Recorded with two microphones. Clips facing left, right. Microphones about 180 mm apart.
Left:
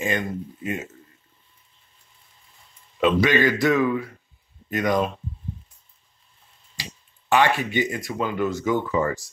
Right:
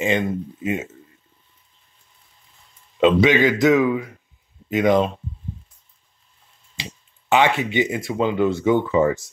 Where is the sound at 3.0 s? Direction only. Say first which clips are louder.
Right 4 dB; 25° right (ahead or behind).